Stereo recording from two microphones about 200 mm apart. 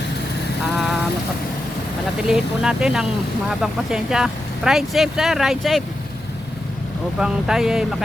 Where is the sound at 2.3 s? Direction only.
5° right (ahead or behind).